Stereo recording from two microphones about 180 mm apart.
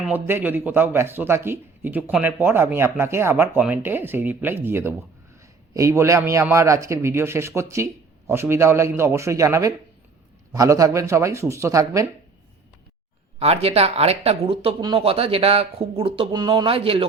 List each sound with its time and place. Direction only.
0.0 s speech: 10° right (ahead or behind)
13.4 s speech: 35° right (ahead or behind)